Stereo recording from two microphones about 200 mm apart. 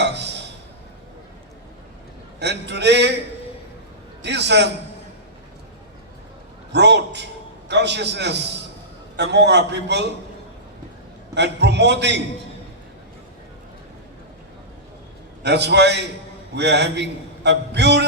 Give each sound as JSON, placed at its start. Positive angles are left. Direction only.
{"t": 0.0, "sound": "a sound", "side_deg": -60}
{"t": 2.4, "sound": "a man's voice", "side_deg": -60}
{"t": 4.2, "sound": "a man's voice", "side_deg": -60}
{"t": 6.7, "sound": "a man's voice", "side_deg": -60}
{"t": 11.3, "sound": "a man's voice", "side_deg": -60}
{"t": 15.4, "sound": "a man's voice", "side_deg": -60}